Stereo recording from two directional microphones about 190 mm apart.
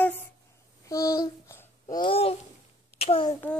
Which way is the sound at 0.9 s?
15° left (ahead or behind).